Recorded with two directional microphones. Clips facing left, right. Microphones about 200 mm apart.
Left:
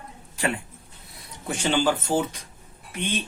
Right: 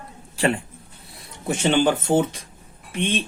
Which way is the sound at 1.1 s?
25° right (ahead or behind).